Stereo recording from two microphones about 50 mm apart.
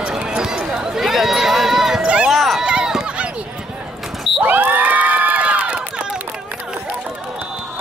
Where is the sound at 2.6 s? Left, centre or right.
Centre.